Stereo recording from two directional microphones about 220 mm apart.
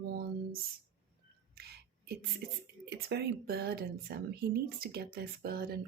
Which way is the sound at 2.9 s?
50° right (ahead or behind).